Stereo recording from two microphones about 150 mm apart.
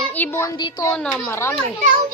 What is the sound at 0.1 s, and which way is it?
Speech, 15° left (ahead or behind).